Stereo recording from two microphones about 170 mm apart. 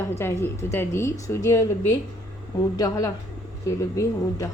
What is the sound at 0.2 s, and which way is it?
A woman's voice, 15° left (ahead or behind).